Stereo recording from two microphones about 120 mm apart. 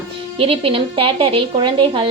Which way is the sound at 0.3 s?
50° right (ahead or behind).